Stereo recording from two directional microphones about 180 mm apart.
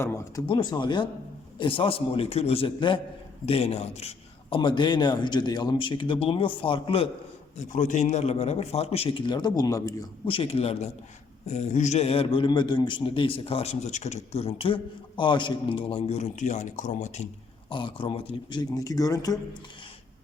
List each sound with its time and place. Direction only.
0.0 s speech: 15° left (ahead or behind)
0.4 s a man's voice: 25° left (ahead or behind)
7.5 s a man's voice: 40° left (ahead or behind); by 9.9 s 20° left (ahead or behind)
10.2 s a man's voice: 30° left (ahead or behind)
17.7 s a man's voice: 25° left (ahead or behind)